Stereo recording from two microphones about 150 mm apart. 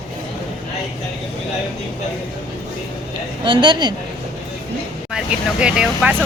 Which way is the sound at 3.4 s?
30° right (ahead or behind).